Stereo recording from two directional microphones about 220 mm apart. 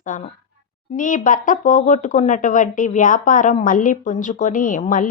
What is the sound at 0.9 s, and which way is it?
Speech, 35° left (ahead or behind).